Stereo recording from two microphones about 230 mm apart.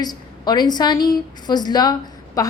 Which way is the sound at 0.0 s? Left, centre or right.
Centre.